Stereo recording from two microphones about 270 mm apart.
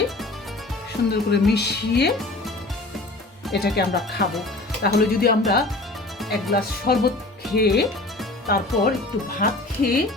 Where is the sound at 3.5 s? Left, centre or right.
Left.